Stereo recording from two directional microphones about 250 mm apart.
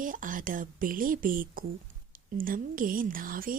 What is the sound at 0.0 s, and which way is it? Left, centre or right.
A woman's voice, right.